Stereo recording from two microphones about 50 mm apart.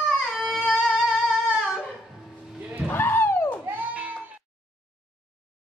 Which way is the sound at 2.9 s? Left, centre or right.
Left.